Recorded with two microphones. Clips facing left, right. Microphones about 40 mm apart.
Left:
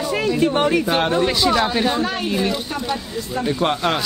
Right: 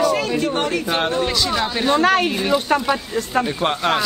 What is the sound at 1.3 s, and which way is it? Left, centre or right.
Speech, centre.